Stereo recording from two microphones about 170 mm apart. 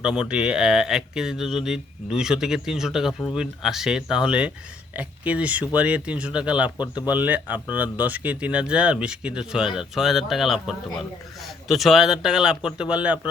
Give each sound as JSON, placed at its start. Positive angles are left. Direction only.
{"t": 0.0, "sound": "speech", "side_deg": -5}
{"t": 6.7, "sound": "speech", "side_deg": 25}
{"t": 7.1, "sound": "speech", "side_deg": -10}